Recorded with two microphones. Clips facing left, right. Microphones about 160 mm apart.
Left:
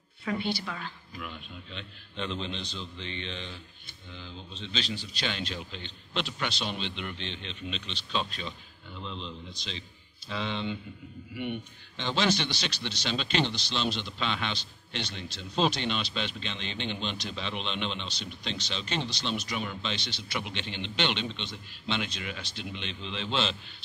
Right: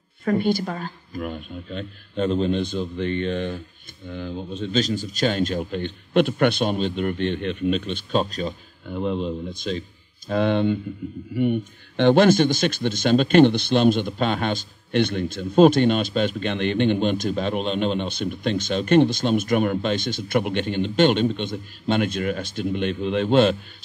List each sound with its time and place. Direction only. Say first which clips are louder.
0.2 s speech: right 10 dB; 45° right (ahead or behind)
12.0 s speech: right 13 dB; 55° right (ahead or behind)